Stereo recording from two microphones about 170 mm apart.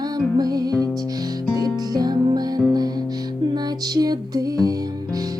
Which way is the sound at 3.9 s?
25° right (ahead or behind).